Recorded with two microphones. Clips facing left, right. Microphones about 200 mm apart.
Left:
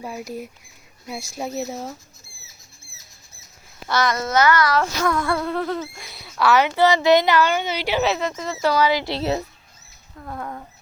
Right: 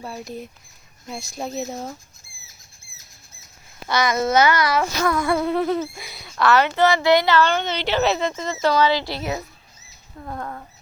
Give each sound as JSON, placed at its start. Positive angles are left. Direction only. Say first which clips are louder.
{"t": 0.0, "sound": "speech", "louder": "left 2 dB", "side_deg": 10}
{"t": 3.8, "sound": "a child's voice", "louder": "even", "side_deg": 0}
{"t": 4.4, "sound": "speech", "louder": "left 2 dB", "side_deg": -20}
{"t": 10.2, "sound": "speech", "louder": "right 1 dB", "side_deg": -5}